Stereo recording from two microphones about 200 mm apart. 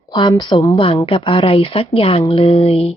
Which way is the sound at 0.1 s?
25° left (ahead or behind).